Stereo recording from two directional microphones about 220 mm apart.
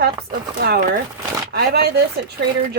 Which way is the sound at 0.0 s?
45° right (ahead or behind).